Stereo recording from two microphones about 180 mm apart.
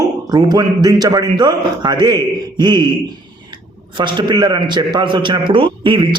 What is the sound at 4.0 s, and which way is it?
A man's voice, 25° right (ahead or behind).